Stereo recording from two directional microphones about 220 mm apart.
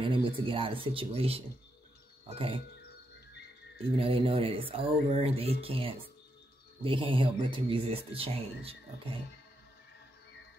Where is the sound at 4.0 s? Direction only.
25° right (ahead or behind).